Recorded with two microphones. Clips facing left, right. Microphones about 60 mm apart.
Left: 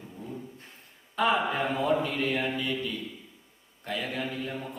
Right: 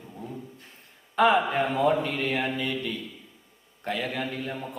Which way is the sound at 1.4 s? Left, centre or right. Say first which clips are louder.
Right 4 dB; right.